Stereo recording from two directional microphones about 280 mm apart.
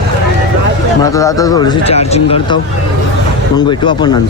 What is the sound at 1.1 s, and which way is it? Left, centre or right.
Speech, centre.